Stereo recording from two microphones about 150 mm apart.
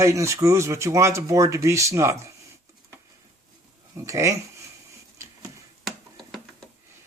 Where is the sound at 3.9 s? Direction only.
20° right (ahead or behind).